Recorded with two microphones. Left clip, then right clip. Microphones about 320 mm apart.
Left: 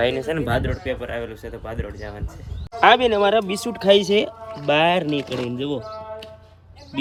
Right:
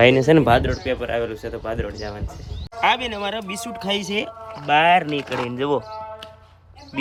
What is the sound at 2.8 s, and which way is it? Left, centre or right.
Speech, left.